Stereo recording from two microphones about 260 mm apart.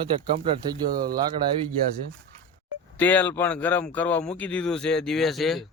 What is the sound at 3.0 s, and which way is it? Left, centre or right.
A man's voice, centre.